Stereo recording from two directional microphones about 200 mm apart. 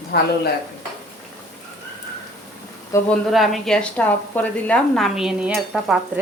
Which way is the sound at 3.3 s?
Centre (ahead or behind).